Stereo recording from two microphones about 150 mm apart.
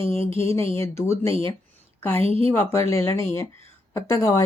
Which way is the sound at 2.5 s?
20° left (ahead or behind).